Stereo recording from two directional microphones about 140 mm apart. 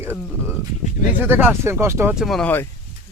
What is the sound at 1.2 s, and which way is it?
Speech, 15° right (ahead or behind).